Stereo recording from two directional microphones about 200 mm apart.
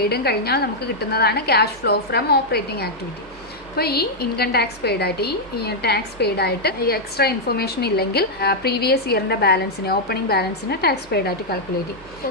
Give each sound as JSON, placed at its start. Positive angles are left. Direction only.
{"t": 0.0, "sound": "a woman's voice", "side_deg": 50}